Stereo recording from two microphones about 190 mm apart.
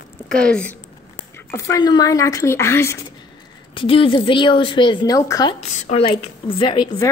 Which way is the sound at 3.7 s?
30° left (ahead or behind).